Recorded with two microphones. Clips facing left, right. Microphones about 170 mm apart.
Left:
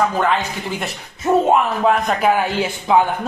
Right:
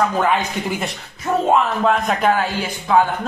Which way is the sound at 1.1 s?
25° left (ahead or behind).